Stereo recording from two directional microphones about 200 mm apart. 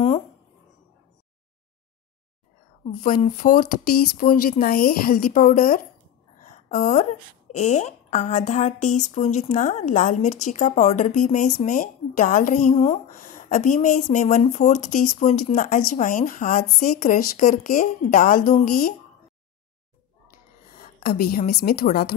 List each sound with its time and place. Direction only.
2.8 s a woman's voice: 40° left (ahead or behind)
20.7 s a woman's voice: 45° left (ahead or behind)